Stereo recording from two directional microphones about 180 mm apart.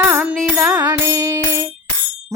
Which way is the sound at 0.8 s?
15° right (ahead or behind).